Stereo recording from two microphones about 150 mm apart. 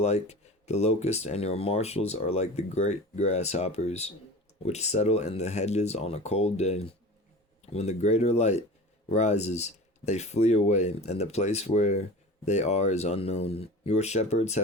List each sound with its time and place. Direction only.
0.0 s speech: 45° left (ahead or behind)